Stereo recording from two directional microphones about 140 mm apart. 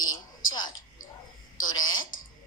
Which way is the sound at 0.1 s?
30° left (ahead or behind).